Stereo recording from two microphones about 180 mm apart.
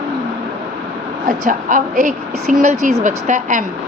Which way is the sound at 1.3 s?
45° right (ahead or behind).